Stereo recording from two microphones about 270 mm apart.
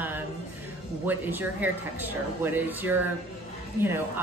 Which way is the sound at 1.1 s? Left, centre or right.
Centre.